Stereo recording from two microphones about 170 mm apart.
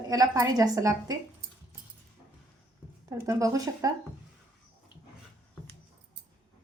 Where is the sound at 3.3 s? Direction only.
20° right (ahead or behind).